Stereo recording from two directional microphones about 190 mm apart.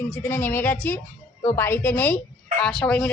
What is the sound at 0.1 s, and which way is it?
A woman's voice, 10° left (ahead or behind).